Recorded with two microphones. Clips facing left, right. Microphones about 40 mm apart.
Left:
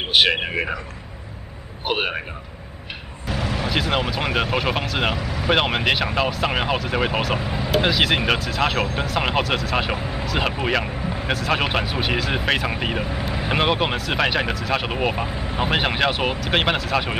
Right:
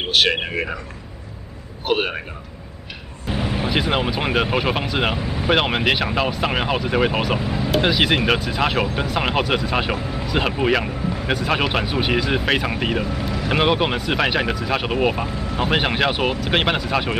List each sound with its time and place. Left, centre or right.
0.1 s a man's voice: centre
1.9 s a man's voice: centre
3.3 s a sound: right
3.7 s speech: centre
5.1 s speech: right
5.4 s speech: centre
9.9 s a man's voice: centre
10.2 s speech: centre
13.0 s speech: centre
13.5 s speech: centre
15.2 s speech: centre
15.6 s speech: centre